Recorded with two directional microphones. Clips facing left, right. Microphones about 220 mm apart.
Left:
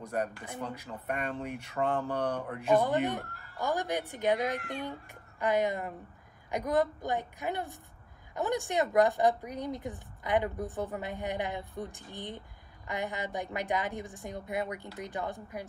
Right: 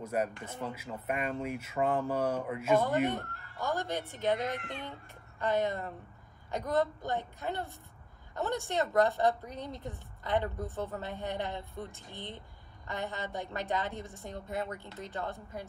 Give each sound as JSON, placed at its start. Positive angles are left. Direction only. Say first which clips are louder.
{"t": 0.1, "sound": "speech", "louder": "even", "side_deg": -5}
{"t": 3.6, "sound": "a woman's voice", "louder": "left 2 dB", "side_deg": 15}